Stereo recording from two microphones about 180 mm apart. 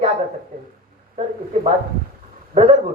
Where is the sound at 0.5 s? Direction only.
55° right (ahead or behind).